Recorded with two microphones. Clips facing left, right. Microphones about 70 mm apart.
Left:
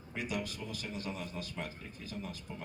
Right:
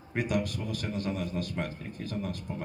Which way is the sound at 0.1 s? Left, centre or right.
Right.